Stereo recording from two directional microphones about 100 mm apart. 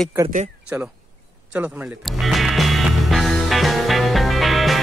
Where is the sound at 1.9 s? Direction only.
Centre (ahead or behind).